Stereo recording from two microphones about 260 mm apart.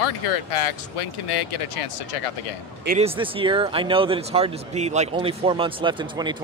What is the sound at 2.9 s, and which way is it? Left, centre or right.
Speech, right.